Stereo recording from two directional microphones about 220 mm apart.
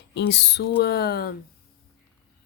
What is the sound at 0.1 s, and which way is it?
Speech, 50° left (ahead or behind).